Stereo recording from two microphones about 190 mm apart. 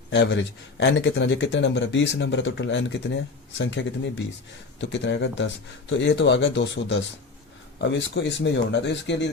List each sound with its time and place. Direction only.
0.1 s speech: 75° left (ahead or behind)